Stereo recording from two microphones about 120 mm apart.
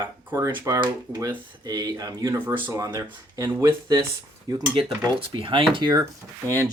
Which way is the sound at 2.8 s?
30° right (ahead or behind).